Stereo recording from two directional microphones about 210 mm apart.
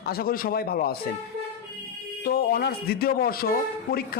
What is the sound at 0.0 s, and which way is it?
Speech, 45° left (ahead or behind).